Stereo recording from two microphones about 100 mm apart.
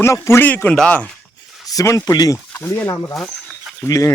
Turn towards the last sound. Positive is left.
turn(degrees=30)  # may be behind; listen again after turning